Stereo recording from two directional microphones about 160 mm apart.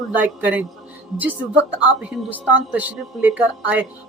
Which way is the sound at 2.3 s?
10° right (ahead or behind).